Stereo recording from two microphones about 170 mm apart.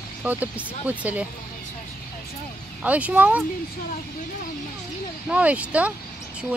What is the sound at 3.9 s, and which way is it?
Speech, 55° left (ahead or behind).